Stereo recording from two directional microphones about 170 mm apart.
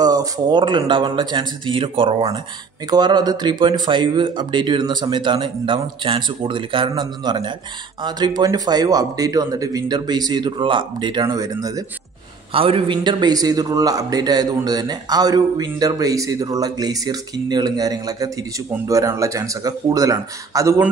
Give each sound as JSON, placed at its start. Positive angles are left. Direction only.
{"t": 0.0, "sound": "a man's voice", "side_deg": -20}
{"t": 12.5, "sound": "a man's voice", "side_deg": -30}